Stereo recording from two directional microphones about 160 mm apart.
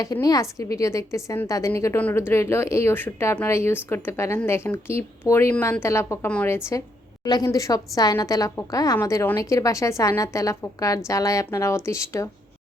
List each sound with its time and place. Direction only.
0.0 s a woman's voice: 20° left (ahead or behind)
7.3 s a woman's voice: 25° left (ahead or behind)